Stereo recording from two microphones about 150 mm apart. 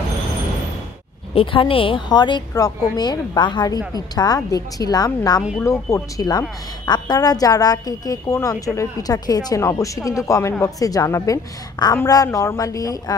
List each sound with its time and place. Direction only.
1.3 s a woman's voice: 35° left (ahead or behind)